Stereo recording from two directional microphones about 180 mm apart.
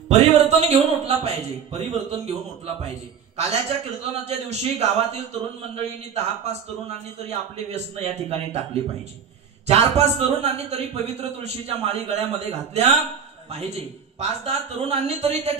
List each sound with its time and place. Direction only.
0.1 s a man's voice: 35° right (ahead or behind)
9.7 s a man's voice: 35° right (ahead or behind)